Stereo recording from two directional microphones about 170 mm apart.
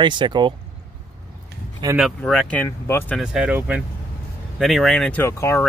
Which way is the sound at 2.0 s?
Centre (ahead or behind).